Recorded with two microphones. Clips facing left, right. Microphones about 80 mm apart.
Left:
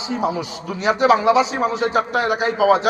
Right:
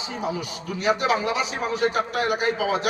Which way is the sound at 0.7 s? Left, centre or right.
Left.